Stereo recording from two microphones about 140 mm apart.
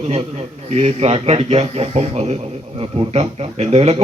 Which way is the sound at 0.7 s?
50° right (ahead or behind).